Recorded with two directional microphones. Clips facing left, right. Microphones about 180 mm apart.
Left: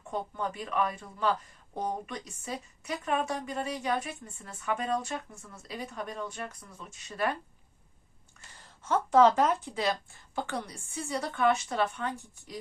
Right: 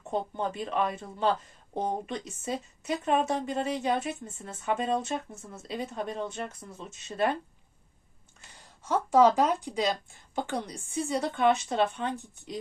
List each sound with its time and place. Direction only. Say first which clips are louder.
0.0 s speech: right 3 dB; 25° right (ahead or behind)
8.5 s speech: even; 10° right (ahead or behind)